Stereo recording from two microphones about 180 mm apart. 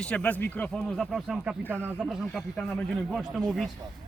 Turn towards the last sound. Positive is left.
turn(degrees=0)  # may be behind; listen again after turning